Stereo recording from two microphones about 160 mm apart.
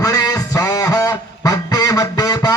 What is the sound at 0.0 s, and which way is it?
Goose, 20° left (ahead or behind).